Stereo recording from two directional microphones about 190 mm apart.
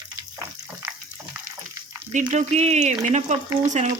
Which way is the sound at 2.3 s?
35° right (ahead or behind).